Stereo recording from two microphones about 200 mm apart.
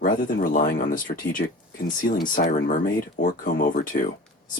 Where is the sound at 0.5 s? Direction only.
45° left (ahead or behind).